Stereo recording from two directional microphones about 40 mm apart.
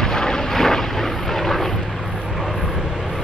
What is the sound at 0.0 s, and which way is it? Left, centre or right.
Vehicle, centre.